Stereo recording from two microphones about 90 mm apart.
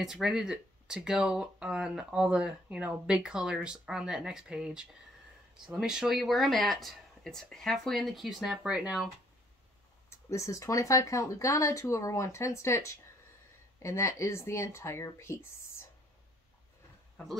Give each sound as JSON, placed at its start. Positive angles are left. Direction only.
{"t": 0.0, "sound": "speech", "side_deg": -5}
{"t": 10.0, "sound": "speech", "side_deg": 35}